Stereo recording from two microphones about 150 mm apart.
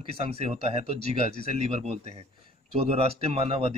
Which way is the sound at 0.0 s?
40° right (ahead or behind).